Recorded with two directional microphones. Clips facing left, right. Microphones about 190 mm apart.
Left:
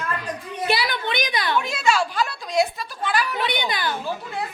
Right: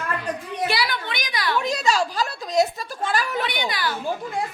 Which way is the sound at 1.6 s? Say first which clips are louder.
Right 2 dB; 40° right (ahead or behind).